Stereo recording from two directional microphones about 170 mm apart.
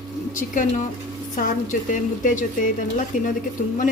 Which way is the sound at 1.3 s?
50° left (ahead or behind).